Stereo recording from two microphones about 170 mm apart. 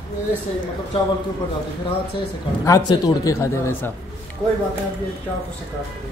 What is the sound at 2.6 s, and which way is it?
Speech, 20° left (ahead or behind).